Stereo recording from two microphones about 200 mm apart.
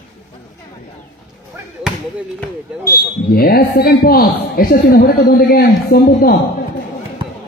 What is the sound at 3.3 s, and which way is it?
A man's voice, 50° left (ahead or behind).